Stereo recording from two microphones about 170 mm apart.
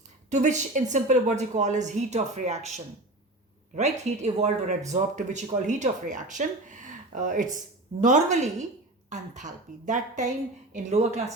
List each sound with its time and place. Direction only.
0.3 s a woman's voice: 45° right (ahead or behind)